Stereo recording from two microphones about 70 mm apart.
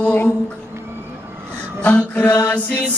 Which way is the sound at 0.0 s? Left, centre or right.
Left.